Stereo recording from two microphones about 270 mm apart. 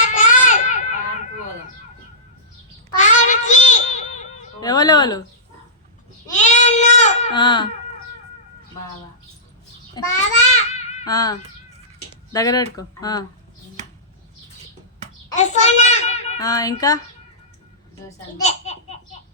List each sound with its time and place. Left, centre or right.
0.0 s a sound: left
3.0 s a sound: left
4.6 s speech: centre
6.3 s baby cry: left
10.0 s speech: centre
10.7 s baby cry: left
12.1 s a sound: centre
12.7 s speech: centre
15.4 s a child's voice: left
16.4 s speech: centre
18.3 s a child's voice: left